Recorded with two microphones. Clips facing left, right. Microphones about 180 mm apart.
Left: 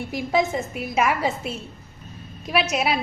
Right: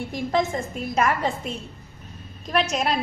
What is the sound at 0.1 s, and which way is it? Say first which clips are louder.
A woman's voice: left 2 dB; 5° left (ahead or behind).